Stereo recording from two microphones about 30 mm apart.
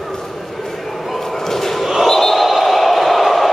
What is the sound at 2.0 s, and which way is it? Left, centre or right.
Basketball bounce, centre.